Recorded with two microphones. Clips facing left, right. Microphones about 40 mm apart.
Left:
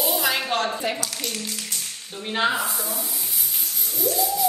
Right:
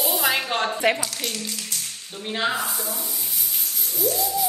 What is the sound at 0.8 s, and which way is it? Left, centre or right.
Speech, right.